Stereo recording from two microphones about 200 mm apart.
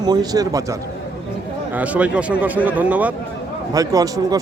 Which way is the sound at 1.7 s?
5° right (ahead or behind).